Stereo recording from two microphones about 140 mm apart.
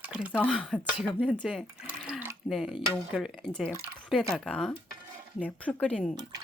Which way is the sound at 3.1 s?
Centre (ahead or behind).